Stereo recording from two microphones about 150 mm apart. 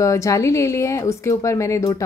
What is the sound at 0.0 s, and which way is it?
Speech, 20° left (ahead or behind).